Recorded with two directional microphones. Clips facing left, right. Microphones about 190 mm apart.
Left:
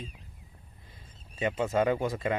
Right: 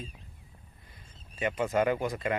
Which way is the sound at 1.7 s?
25° left (ahead or behind).